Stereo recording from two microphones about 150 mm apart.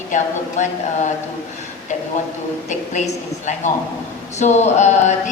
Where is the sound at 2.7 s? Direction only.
50° left (ahead or behind).